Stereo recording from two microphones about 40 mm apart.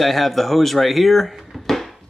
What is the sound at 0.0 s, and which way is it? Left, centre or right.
Speech, centre.